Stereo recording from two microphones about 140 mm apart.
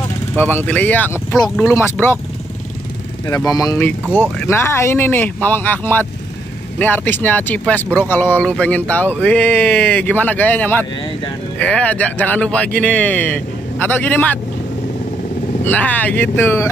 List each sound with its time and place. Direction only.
0.4 s speech: 15° left (ahead or behind)
3.5 s speech: 25° left (ahead or behind)
3.8 s speech: 15° left (ahead or behind)
15.6 s speech: 10° left (ahead or behind)